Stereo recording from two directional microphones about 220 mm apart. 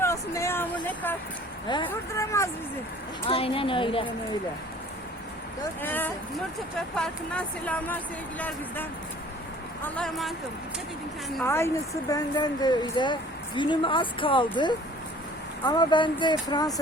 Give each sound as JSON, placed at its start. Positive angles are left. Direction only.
{"t": 0.0, "sound": "vehicle", "side_deg": 10}
{"t": 1.6, "sound": "speech", "side_deg": 20}
{"t": 3.2, "sound": "speech", "side_deg": 25}
{"t": 5.8, "sound": "speech", "side_deg": 10}
{"t": 11.4, "sound": "speech", "side_deg": 10}